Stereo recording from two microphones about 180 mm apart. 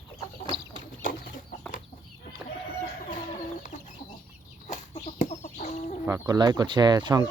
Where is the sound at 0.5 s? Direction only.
70° right (ahead or behind).